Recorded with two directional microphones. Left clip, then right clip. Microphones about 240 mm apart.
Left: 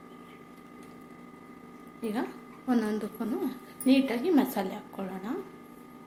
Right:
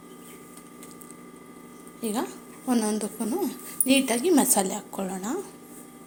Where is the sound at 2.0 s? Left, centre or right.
Right.